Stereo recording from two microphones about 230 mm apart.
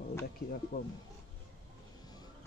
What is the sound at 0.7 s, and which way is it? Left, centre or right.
Speech, left.